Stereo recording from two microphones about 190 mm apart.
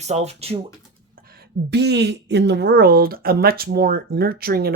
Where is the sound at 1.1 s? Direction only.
50° right (ahead or behind).